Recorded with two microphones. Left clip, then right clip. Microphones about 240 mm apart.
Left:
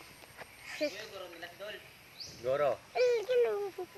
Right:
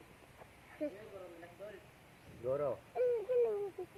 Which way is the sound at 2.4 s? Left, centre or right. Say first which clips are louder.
Left 6 dB; left.